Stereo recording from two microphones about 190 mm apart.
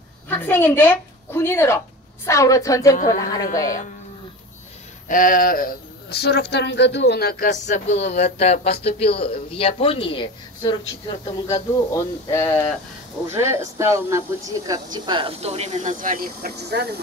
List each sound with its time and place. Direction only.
0.3 s a woman's voice: 10° left (ahead or behind)
5.0 s a woman's voice: 45° left (ahead or behind); by 12.7 s 15° left (ahead or behind)
13.3 s speech: 15° right (ahead or behind); by 16.9 s 60° right (ahead or behind)